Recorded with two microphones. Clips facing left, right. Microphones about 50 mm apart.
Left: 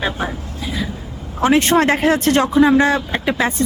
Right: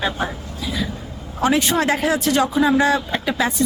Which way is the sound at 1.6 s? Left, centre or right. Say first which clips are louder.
Left 4 dB; left.